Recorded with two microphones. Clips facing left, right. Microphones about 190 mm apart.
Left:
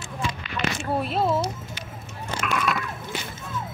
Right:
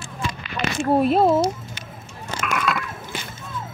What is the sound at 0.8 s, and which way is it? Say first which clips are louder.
Speech: right 10 dB; 50° right (ahead or behind).